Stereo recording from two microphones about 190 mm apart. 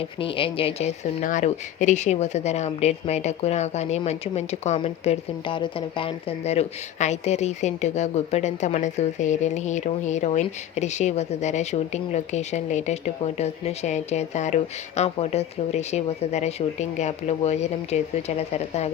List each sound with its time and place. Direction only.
0.2 s a woman's voice: 30° left (ahead or behind)